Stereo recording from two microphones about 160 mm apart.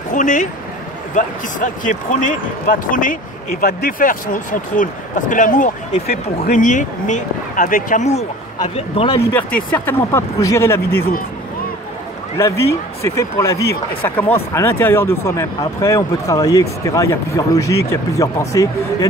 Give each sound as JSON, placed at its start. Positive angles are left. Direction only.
{"t": 0.1, "sound": "a man's voice", "side_deg": 50}
{"t": 9.3, "sound": "speech", "side_deg": 10}
{"t": 12.4, "sound": "speech", "side_deg": 20}